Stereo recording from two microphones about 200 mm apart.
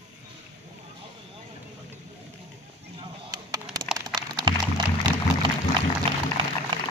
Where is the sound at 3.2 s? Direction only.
20° right (ahead or behind).